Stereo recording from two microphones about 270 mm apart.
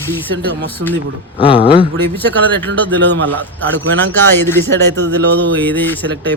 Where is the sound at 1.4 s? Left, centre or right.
Centre.